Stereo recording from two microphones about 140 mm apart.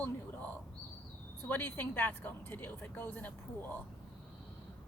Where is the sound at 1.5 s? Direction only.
15° left (ahead or behind).